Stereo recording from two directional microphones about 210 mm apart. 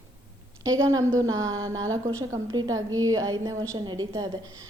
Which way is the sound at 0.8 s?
15° right (ahead or behind).